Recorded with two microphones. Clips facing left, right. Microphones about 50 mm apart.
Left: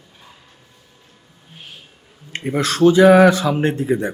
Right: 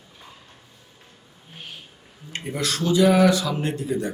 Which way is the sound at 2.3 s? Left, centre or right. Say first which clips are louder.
Left 6 dB; left.